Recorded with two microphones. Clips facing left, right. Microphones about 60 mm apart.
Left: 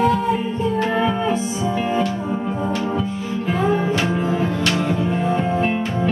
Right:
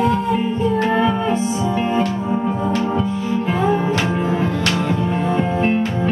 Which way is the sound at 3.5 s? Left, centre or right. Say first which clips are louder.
Even; centre.